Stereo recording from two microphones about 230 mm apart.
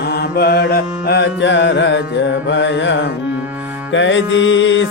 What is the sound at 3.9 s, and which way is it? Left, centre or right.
Mantra, left.